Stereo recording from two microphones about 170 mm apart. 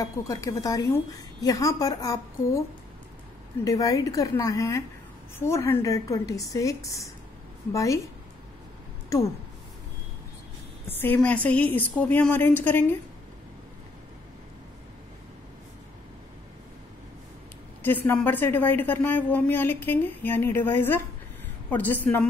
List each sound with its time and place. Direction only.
0.0 s a woman's voice: 20° left (ahead or behind)
3.6 s a woman's voice: 20° left (ahead or behind)
10.9 s a woman's voice: 10° left (ahead or behind)
17.8 s a woman's voice: 10° left (ahead or behind)